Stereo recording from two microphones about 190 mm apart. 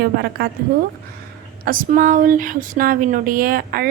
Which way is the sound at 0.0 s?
55° right (ahead or behind).